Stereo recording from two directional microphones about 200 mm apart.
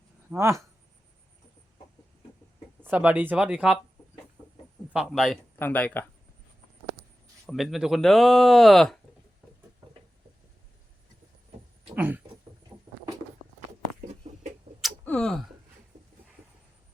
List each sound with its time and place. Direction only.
0.3 s speech: 15° right (ahead or behind)
2.8 s speech: 10° right (ahead or behind)
4.9 s speech: 5° right (ahead or behind)
5.5 s speech: 10° left (ahead or behind)
7.5 s speech: centre (ahead or behind)
9.8 s a sound: 15° right (ahead or behind)
11.9 s a sound: 10° right (ahead or behind)
12.7 s vehicle: 20° right (ahead or behind)
14.8 s a sound: 5° left (ahead or behind)